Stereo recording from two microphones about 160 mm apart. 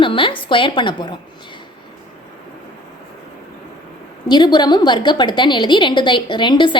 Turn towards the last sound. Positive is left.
turn(degrees=30)  # may be behind; listen again after turning